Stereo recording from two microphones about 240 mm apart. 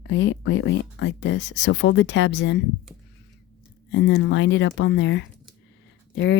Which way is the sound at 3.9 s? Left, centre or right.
Left.